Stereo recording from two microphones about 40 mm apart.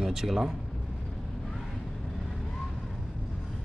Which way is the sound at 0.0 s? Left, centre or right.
Centre.